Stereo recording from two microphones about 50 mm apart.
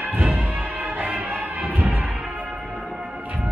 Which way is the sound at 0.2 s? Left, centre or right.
Right.